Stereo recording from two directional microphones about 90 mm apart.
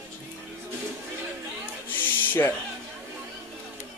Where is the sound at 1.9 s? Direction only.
20° left (ahead or behind).